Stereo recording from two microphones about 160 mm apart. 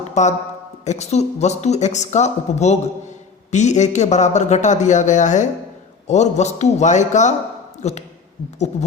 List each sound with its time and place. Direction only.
0.1 s speech: 45° left (ahead or behind)